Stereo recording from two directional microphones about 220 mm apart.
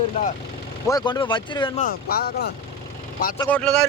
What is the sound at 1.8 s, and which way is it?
Speech, 45° left (ahead or behind).